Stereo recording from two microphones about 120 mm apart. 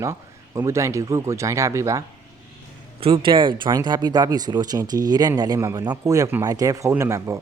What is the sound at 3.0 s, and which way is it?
Speech, 45° right (ahead or behind).